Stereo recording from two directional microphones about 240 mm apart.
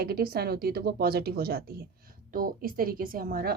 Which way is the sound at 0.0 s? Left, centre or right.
Right.